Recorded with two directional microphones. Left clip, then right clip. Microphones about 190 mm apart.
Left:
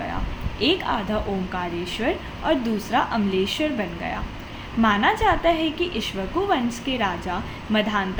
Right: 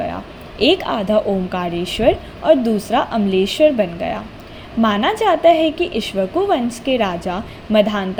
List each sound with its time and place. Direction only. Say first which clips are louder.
0.6 s a woman's voice: right 6 dB; 30° right (ahead or behind)